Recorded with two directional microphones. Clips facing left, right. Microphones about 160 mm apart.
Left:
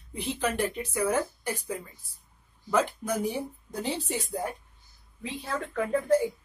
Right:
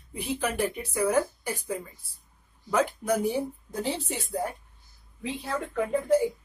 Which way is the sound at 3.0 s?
5° right (ahead or behind).